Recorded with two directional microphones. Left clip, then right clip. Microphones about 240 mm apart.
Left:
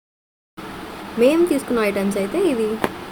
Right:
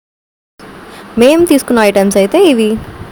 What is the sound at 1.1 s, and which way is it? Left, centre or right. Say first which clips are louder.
Speech: right 8 dB; right.